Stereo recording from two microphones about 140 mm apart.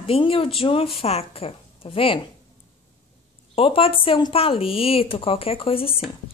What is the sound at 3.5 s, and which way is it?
A woman's voice, 40° left (ahead or behind).